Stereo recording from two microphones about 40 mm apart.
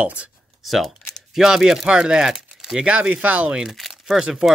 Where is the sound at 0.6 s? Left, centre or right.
Centre.